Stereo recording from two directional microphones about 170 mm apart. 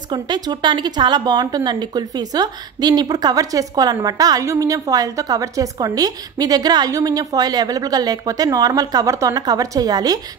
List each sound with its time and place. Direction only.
0.1 s a woman's voice: 25° right (ahead or behind)